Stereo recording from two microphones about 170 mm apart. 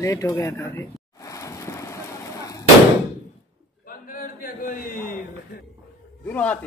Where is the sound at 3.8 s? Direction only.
55° left (ahead or behind).